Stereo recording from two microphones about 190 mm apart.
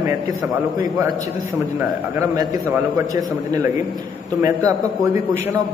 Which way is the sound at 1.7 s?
15° right (ahead or behind).